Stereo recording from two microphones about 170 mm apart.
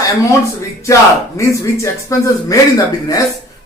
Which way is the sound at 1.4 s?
20° left (ahead or behind).